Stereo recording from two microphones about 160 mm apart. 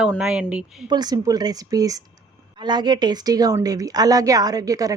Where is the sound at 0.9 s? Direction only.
25° right (ahead or behind).